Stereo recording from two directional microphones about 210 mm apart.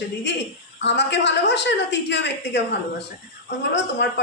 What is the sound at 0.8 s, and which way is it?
A woman's voice, 55° left (ahead or behind).